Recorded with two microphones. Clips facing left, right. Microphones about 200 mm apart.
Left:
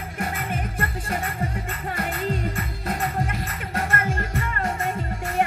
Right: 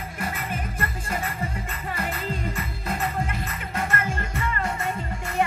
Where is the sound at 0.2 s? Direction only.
50° left (ahead or behind).